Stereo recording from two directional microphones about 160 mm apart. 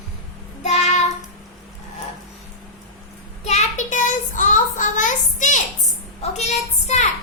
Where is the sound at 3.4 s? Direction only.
50° left (ahead or behind).